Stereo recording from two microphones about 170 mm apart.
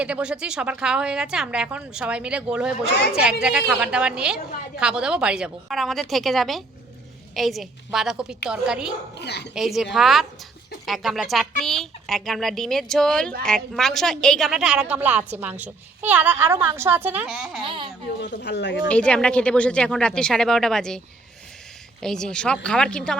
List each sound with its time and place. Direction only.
0.0 s a woman's voice: 5° right (ahead or behind)
9.1 s speech: 80° left
9.6 s a woman's voice: centre (ahead or behind)
17.6 s speech: 30° right (ahead or behind)
18.2 s speech: 90° left
18.9 s a woman's voice: 5° left (ahead or behind)
22.0 s a woman's voice: 5° left (ahead or behind)